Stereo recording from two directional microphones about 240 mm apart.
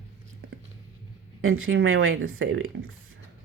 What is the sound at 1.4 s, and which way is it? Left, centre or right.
Speech, right.